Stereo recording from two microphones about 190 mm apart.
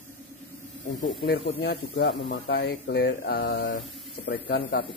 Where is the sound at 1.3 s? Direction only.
55° left (ahead or behind).